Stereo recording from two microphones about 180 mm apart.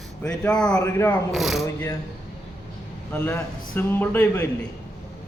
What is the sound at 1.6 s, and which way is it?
Speech, 15° left (ahead or behind).